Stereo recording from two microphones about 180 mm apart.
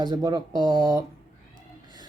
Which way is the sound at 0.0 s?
20° right (ahead or behind).